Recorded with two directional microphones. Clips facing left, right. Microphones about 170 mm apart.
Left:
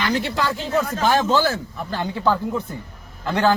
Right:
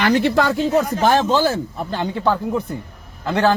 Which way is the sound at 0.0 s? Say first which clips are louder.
Right 7 dB; 60° right (ahead or behind).